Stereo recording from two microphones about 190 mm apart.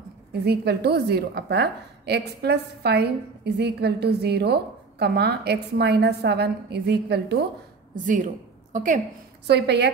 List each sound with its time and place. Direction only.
0.3 s a woman's voice: 60° right (ahead or behind)
7.9 s a woman's voice: 45° right (ahead or behind)
9.5 s a woman's voice: 60° right (ahead or behind)